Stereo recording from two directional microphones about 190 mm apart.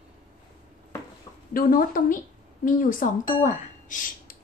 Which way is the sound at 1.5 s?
50° left (ahead or behind).